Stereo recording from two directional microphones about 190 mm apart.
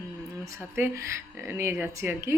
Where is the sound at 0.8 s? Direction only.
15° right (ahead or behind).